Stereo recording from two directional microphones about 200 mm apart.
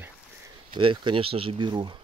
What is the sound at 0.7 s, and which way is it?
Speech, 25° right (ahead or behind).